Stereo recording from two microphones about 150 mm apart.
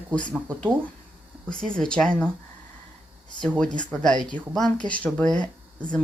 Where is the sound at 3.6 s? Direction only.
5° left (ahead or behind).